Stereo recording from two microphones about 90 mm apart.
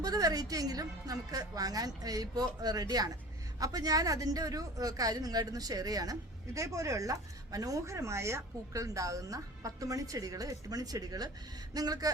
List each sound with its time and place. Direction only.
0.0 s a woman's voice: 45° right (ahead or behind)